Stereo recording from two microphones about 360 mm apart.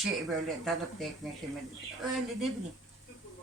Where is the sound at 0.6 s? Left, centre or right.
Centre.